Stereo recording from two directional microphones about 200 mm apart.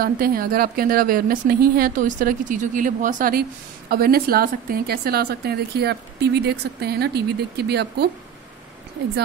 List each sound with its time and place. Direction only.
0.0 s speech: 50° right (ahead or behind)